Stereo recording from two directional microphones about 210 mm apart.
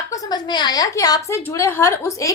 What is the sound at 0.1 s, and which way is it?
A woman's voice, 20° left (ahead or behind).